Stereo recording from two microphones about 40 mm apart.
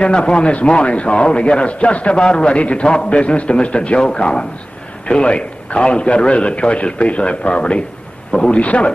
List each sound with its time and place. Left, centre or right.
0.0 s a man's voice: left